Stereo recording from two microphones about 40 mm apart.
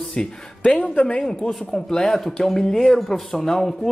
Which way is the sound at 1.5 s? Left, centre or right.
Centre.